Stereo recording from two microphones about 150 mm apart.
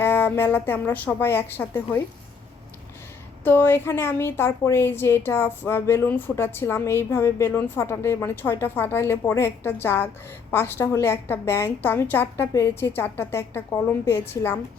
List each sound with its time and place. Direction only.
0.0 s a woman's voice: 15° left (ahead or behind)
3.4 s a woman's voice: 15° left (ahead or behind)